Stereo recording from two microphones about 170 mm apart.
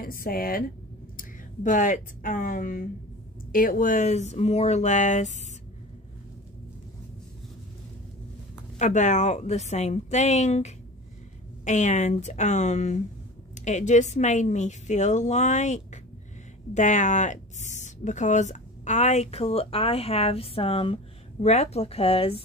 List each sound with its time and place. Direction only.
0.0 s speech: 60° left (ahead or behind)
1.1 s speech: 50° left (ahead or behind)
8.7 s speech: 45° left (ahead or behind)